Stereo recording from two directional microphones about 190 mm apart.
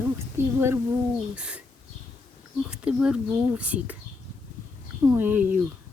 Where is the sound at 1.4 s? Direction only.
5° right (ahead or behind).